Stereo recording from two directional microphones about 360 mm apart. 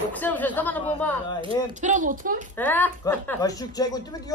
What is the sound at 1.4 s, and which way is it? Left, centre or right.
Speech, centre.